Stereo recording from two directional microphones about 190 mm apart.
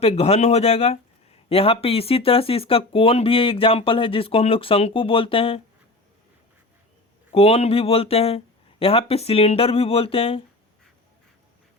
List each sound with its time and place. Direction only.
0.0 s speech: 35° left (ahead or behind)
7.3 s speech: 30° left (ahead or behind)